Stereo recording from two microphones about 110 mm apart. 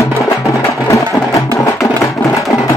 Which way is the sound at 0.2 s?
25° left (ahead or behind).